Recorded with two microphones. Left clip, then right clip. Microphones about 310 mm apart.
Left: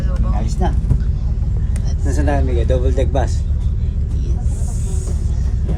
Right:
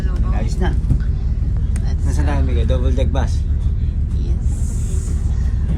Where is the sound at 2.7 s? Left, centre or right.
Left.